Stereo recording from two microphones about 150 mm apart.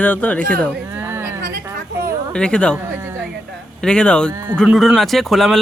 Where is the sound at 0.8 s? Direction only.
15° right (ahead or behind).